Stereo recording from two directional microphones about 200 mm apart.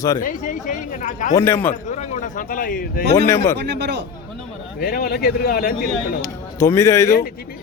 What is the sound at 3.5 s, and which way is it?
Speech, 60° right (ahead or behind).